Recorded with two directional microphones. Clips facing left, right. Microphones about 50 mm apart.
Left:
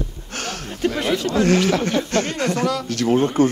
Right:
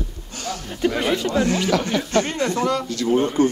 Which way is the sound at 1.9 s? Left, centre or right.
Right.